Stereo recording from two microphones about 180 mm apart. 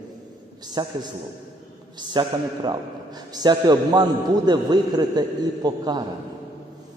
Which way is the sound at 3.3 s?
25° right (ahead or behind).